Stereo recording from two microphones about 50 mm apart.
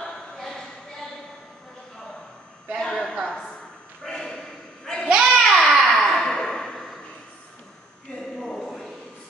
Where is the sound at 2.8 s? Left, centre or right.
Centre.